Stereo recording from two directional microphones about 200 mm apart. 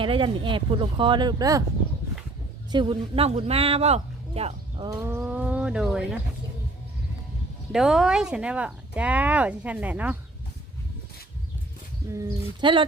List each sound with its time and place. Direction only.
0.0 s speech: 25° right (ahead or behind)
2.7 s speech: 25° right (ahead or behind)
4.9 s speech: 15° right (ahead or behind)
7.7 s speech: centre (ahead or behind)
12.1 s speech: 25° right (ahead or behind)